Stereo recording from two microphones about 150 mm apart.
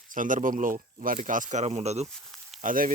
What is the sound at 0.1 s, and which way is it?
Speech, 60° right (ahead or behind).